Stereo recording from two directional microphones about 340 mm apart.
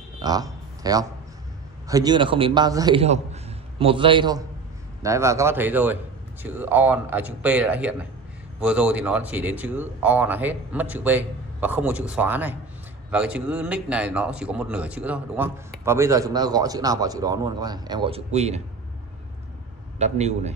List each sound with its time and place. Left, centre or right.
0.2 s a sound: centre
1.9 s speech: centre
20.0 s a man's voice: centre